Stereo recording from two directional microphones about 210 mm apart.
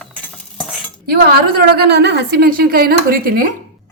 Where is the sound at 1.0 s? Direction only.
50° right (ahead or behind).